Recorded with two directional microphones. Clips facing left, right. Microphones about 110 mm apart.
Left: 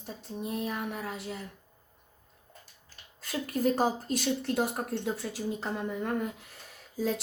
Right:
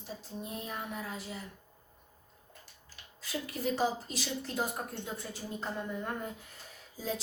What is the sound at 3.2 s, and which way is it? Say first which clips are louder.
A woman's voice: left 6 dB; 50° left (ahead or behind).